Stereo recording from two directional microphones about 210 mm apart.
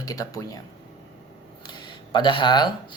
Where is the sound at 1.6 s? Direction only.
20° left (ahead or behind).